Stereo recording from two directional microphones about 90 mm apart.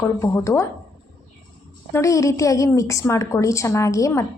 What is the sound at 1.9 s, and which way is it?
A woman's voice, 35° left (ahead or behind).